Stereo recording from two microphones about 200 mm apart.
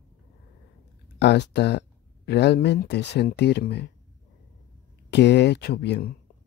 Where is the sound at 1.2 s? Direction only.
55° left (ahead or behind).